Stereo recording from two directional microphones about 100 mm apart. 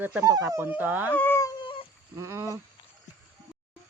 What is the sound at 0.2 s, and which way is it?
Speech, 35° right (ahead or behind).